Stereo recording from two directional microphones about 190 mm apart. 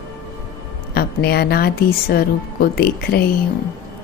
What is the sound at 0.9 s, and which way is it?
A woman's voice, 55° left (ahead or behind).